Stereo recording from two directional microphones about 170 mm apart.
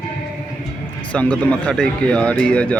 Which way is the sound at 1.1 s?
5° left (ahead or behind).